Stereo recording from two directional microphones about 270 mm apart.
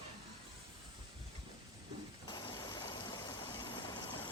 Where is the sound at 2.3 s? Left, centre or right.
Centre.